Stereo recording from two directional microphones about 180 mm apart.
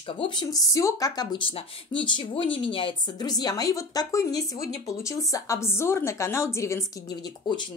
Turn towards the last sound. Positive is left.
turn(degrees=20)  # may be behind; listen again after turning